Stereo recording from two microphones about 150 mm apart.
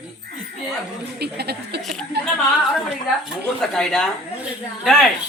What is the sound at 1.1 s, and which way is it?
Speech, 90° right.